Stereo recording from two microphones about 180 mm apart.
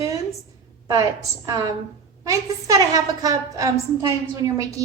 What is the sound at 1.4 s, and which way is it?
A woman's voice, 20° right (ahead or behind).